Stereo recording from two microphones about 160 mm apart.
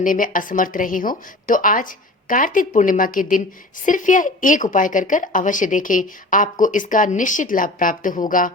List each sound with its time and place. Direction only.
0.0 s a woman's voice: 55° left (ahead or behind)